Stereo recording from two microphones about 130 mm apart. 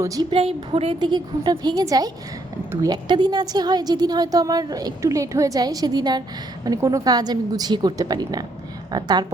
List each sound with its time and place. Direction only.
0.0 s a woman's voice: 25° right (ahead or behind)
0.3 s a woman's voice: 45° right (ahead or behind)